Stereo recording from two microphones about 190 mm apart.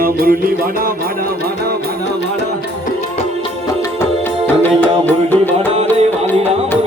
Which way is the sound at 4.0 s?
10° left (ahead or behind).